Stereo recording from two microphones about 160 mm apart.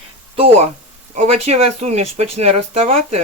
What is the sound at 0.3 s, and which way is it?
Speech, 40° right (ahead or behind).